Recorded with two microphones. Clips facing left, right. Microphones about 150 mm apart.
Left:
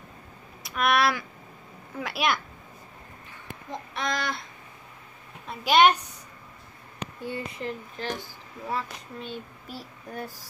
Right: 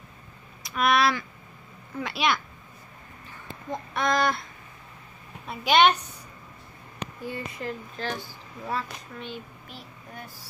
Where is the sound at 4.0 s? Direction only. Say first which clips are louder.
Right 6 dB; 50° right (ahead or behind).